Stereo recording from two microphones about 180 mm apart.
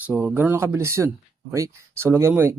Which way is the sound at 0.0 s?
5° right (ahead or behind).